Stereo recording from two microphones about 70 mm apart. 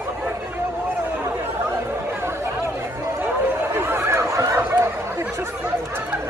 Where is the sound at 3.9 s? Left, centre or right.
Right.